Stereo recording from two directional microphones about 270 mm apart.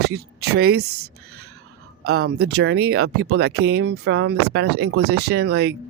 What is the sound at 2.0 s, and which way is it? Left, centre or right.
Speech, right.